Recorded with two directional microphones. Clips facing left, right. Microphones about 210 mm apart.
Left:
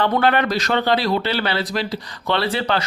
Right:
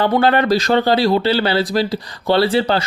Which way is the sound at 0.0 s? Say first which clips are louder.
Right 3 dB; 30° right (ahead or behind).